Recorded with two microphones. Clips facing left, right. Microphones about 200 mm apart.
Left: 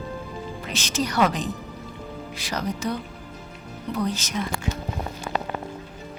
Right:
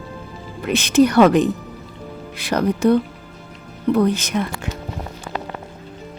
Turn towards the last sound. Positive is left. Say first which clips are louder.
# right 6 dB
turn(degrees=-60)  # may be behind; listen again after turning